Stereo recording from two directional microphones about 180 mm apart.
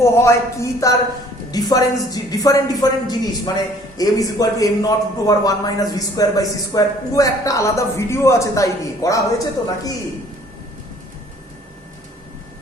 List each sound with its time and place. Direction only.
0.0 s a man's voice: 15° left (ahead or behind)